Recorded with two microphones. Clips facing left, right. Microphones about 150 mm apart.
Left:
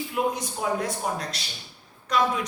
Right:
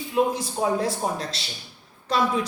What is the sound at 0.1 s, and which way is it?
A woman's voice, 30° right (ahead or behind).